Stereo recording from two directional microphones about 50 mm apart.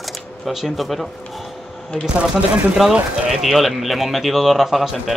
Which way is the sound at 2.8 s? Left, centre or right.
Centre.